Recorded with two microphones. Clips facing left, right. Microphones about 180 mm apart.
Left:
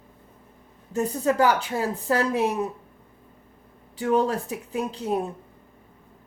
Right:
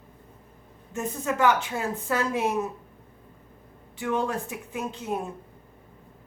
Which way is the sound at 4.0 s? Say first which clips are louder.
Left 5 dB; 40° left (ahead or behind).